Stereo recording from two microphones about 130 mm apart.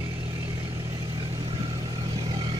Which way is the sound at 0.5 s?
30° right (ahead or behind).